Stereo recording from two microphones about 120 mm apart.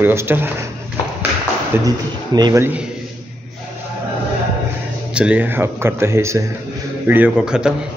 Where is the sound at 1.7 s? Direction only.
15° right (ahead or behind).